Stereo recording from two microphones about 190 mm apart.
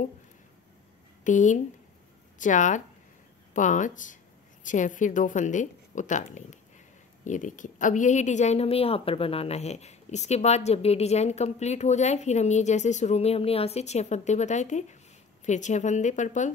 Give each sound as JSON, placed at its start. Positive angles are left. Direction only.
{"t": 1.2, "sound": "a woman's voice", "side_deg": 40}